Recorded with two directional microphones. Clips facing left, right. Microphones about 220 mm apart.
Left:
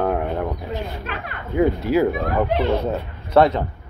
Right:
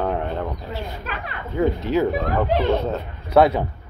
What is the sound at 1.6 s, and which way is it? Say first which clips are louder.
Speech: left 2 dB; 10° left (ahead or behind).